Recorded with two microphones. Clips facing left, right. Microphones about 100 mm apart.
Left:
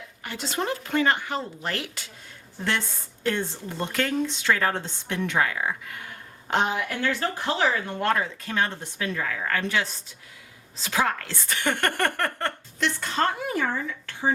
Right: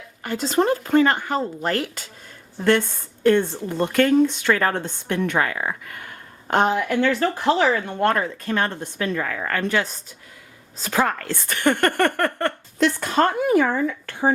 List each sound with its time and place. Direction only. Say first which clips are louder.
0.2 s speech: right 9 dB; 45° right (ahead or behind)